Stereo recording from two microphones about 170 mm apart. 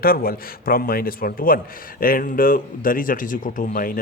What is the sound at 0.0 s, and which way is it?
A man's voice, 60° left (ahead or behind).